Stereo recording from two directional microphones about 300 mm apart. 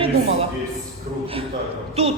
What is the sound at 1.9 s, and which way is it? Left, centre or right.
Speech, centre.